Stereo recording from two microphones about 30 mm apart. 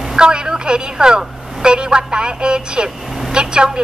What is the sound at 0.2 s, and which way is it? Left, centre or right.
A woman's voice, right.